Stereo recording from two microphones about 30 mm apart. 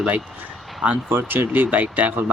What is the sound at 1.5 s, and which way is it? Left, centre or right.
Speech, right.